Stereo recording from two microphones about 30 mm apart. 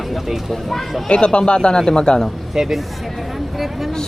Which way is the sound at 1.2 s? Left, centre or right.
Left.